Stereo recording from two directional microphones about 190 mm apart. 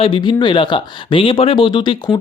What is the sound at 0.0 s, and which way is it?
Speech, 25° left (ahead or behind).